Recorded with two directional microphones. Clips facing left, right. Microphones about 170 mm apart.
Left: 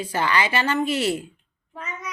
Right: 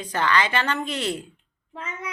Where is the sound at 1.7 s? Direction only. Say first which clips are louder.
Right 1 dB; 25° right (ahead or behind).